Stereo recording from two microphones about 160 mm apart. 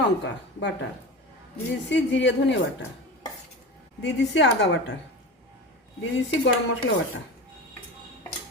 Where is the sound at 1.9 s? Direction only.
90° left.